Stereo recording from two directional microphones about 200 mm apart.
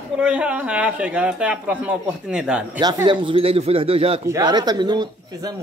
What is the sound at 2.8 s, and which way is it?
Speech, 20° right (ahead or behind).